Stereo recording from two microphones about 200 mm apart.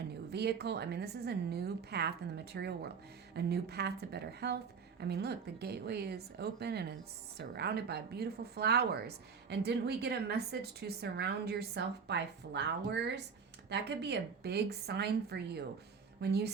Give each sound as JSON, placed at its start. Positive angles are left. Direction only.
{"t": 0.1, "sound": "a woman's voice", "side_deg": -55}